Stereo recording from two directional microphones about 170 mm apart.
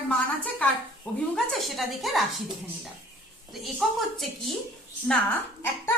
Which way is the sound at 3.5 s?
Centre (ahead or behind).